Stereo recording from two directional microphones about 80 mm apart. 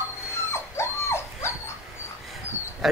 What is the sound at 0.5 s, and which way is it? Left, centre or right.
Dog, left.